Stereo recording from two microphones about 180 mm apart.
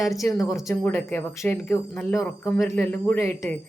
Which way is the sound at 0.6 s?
15° left (ahead or behind).